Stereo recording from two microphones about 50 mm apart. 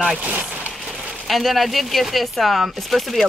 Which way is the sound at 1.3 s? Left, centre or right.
Centre.